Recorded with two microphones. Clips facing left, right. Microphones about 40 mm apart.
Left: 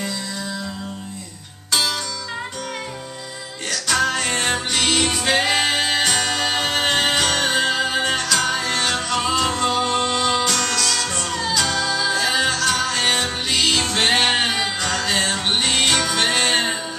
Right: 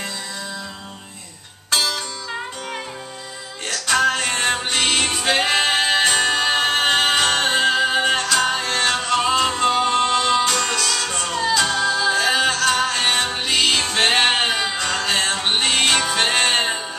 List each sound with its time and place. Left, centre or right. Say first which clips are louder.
3.7 s music: right 2 dB; centre
4.3 s music: right 1 dB; centre
4.7 s music: even; right
7.7 s music: right 3 dB; centre
10.5 s music: right 1 dB; right
10.9 s music: even; centre
11.3 s music: right 3 dB; right
12.9 s music: even; centre